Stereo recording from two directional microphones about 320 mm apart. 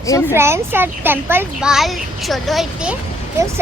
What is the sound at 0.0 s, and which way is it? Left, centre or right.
Speech, centre.